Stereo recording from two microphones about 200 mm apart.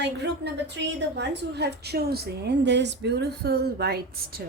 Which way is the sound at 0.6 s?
60° right (ahead or behind).